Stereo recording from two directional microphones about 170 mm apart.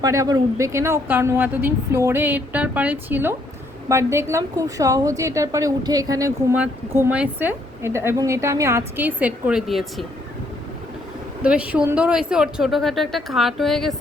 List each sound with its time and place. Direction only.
0.0 s a woman's voice: 20° right (ahead or behind); by 10.1 s centre (ahead or behind)
11.4 s speech: 10° right (ahead or behind)